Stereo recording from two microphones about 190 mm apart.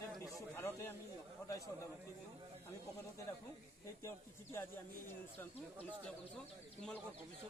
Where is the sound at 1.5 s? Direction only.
15° left (ahead or behind).